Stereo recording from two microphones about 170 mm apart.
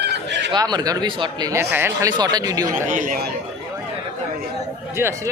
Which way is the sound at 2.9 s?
50° right (ahead or behind).